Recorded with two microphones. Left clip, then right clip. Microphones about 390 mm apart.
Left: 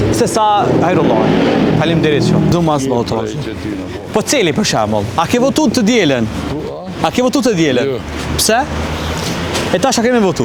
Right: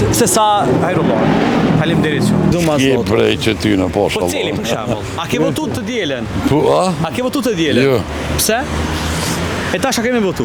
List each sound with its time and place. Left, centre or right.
0.1 s speech: centre
0.4 s speech: centre
5.3 s speech: left
7.0 s speech: left
9.7 s speech: centre